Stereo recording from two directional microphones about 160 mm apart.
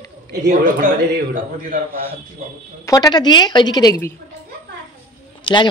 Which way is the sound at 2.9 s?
25° left (ahead or behind).